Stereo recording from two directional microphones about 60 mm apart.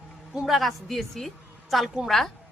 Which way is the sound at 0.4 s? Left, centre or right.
Centre.